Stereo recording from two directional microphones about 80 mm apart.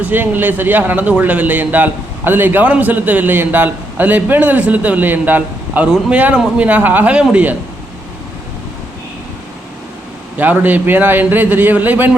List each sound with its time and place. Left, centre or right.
0.0 s a man's voice: right
10.3 s a man's voice: right